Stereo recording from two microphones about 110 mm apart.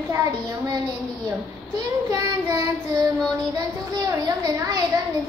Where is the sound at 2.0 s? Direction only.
25° right (ahead or behind).